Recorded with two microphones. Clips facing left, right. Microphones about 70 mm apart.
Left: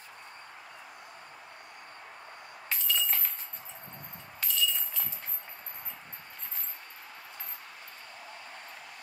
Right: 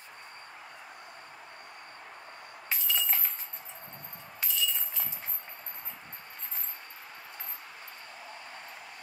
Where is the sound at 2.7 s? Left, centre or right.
Centre.